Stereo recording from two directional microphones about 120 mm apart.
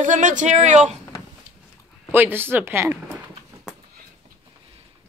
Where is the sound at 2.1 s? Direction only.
20° right (ahead or behind).